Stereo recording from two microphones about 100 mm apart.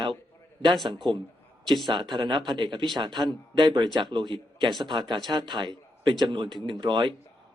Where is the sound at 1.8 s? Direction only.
50° right (ahead or behind).